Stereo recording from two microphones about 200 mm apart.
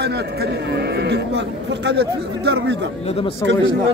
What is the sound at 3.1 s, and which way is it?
Speech, 30° left (ahead or behind).